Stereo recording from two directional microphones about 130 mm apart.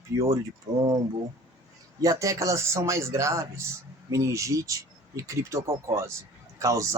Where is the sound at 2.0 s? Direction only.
25° right (ahead or behind).